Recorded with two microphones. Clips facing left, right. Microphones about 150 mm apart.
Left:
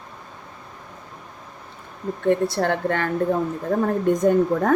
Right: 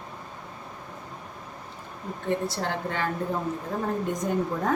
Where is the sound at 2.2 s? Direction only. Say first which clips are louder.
Left 8 dB; 60° left (ahead or behind).